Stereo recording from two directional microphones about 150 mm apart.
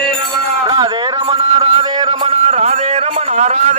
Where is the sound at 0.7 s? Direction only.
30° right (ahead or behind).